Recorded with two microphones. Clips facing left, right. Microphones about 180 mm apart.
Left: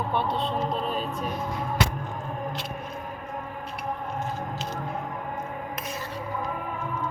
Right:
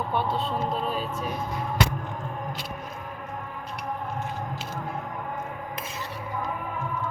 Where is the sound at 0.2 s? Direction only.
5° right (ahead or behind).